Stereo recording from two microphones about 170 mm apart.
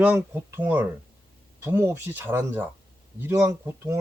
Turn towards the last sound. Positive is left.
turn(degrees=-15)  # may be behind; listen again after turning